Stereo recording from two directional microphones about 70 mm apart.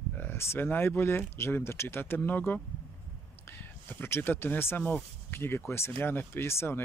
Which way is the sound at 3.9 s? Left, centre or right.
Left.